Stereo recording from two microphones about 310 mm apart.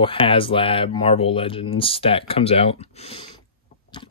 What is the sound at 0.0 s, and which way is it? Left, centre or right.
Speech, centre.